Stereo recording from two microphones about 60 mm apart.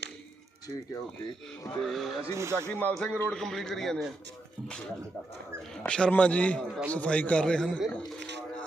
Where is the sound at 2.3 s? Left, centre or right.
Right.